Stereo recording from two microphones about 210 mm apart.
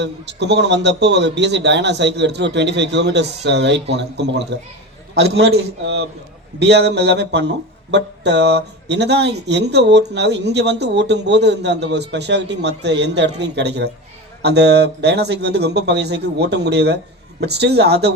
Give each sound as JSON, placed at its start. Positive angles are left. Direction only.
{"t": 0.0, "sound": "speech", "side_deg": -55}